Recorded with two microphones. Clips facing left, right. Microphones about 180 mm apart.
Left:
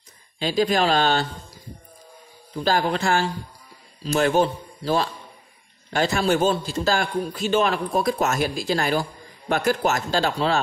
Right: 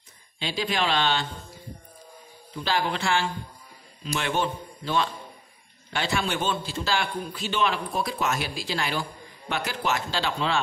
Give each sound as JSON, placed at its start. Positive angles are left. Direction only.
{"t": 0.4, "sound": "a man's voice", "side_deg": 45}